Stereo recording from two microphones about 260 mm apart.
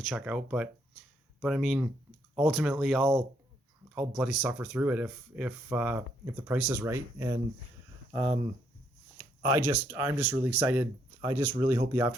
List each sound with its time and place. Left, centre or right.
0.0 s speech: centre
9.1 s speech: centre